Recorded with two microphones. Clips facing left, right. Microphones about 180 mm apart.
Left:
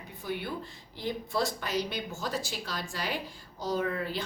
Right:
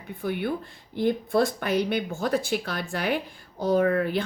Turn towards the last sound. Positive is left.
turn(degrees=-60)  # may be behind; listen again after turning